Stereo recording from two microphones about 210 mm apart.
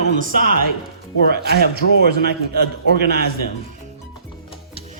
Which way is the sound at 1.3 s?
50° right (ahead or behind).